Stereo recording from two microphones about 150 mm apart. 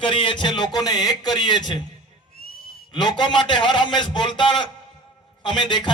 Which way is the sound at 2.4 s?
85° left.